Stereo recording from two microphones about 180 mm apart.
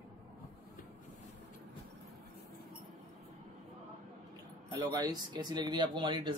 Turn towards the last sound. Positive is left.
turn(degrees=-25)  # may be behind; listen again after turning